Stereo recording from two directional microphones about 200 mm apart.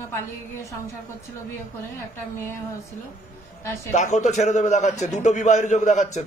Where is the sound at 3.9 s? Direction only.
35° left (ahead or behind).